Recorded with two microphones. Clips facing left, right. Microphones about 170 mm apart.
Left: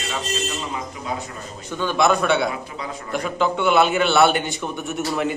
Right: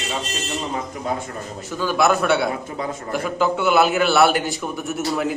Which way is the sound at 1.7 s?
5° right (ahead or behind).